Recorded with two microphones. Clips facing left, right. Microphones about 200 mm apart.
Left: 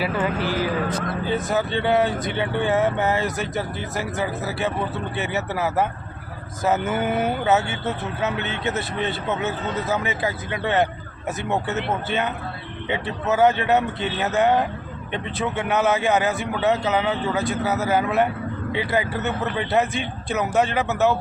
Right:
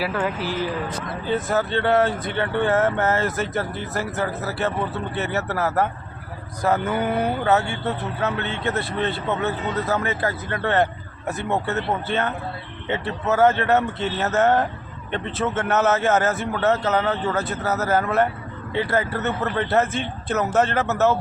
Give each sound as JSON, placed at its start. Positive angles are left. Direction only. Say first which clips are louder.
{"t": 0.0, "sound": "speech", "louder": "left 1 dB", "side_deg": 0}
{"t": 1.5, "sound": "a man's voice", "louder": "right 1 dB", "side_deg": 15}
{"t": 12.0, "sound": "a man's voice", "louder": "right 1 dB", "side_deg": 15}
{"t": 13.3, "sound": "a man's voice", "louder": "even", "side_deg": 15}